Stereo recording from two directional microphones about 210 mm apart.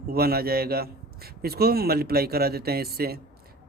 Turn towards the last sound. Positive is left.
turn(degrees=-45)  # may be behind; listen again after turning